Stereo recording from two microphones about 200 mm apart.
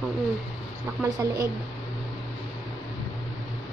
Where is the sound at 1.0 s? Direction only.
15° right (ahead or behind).